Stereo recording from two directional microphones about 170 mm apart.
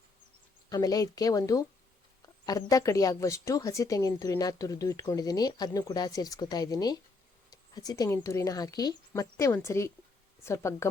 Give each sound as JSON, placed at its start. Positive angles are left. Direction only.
{"t": 0.7, "sound": "speech", "side_deg": 20}